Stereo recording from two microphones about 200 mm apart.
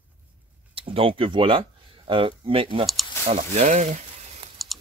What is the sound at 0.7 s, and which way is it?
Speech, 30° right (ahead or behind).